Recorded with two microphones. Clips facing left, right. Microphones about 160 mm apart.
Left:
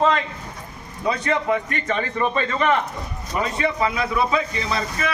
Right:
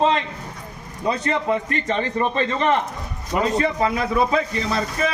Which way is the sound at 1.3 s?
30° right (ahead or behind).